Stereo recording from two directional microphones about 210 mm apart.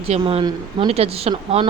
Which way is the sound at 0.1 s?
25° right (ahead or behind).